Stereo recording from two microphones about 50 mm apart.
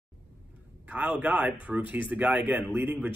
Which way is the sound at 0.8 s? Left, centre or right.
Right.